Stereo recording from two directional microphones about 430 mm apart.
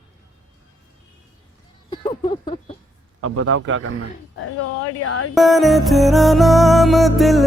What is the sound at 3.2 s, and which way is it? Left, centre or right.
Speech, right.